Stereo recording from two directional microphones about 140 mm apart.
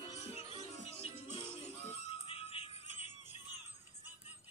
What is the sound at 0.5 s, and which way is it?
Music, 40° left (ahead or behind).